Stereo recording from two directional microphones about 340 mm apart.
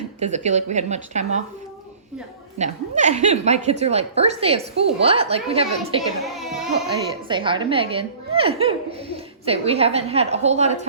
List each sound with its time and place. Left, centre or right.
0.2 s a woman's voice: centre
2.6 s a woman's voice: right
6.2 s a sound: centre
7.3 s a woman's voice: centre